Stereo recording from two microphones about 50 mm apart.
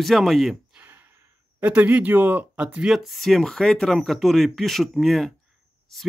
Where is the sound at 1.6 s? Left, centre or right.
Right.